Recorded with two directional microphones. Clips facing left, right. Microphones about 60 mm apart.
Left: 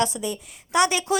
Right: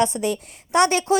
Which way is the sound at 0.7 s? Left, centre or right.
Right.